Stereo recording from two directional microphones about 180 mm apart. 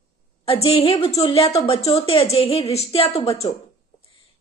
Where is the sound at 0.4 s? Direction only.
30° left (ahead or behind).